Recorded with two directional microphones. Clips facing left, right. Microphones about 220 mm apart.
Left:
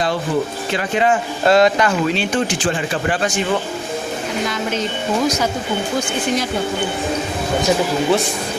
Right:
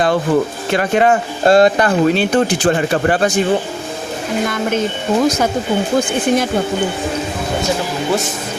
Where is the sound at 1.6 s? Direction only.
35° right (ahead or behind).